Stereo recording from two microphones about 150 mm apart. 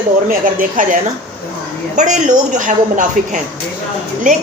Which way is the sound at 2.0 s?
55° right (ahead or behind).